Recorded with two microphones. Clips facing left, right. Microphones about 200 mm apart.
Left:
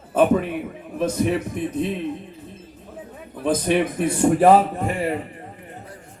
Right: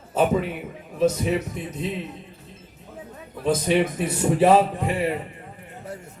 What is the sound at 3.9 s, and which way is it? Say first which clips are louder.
Speech: left 4 dB; 50° left (ahead or behind).